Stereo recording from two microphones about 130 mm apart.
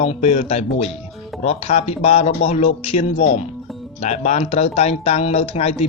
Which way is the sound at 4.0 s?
60° left (ahead or behind).